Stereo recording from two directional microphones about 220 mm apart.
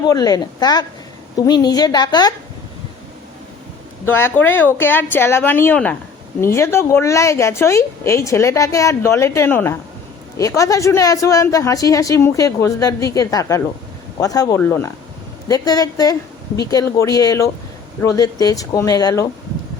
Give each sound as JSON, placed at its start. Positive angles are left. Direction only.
{"t": 0.0, "sound": "a woman's voice", "side_deg": 15}
{"t": 4.0, "sound": "a woman's voice", "side_deg": 10}